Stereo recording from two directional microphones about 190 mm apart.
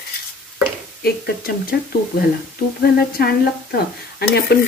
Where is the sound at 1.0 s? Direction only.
50° left (ahead or behind).